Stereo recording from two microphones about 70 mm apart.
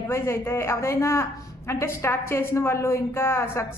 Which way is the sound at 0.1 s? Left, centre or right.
Left.